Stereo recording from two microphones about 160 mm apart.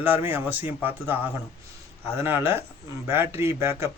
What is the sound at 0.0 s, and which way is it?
Speech, 10° right (ahead or behind).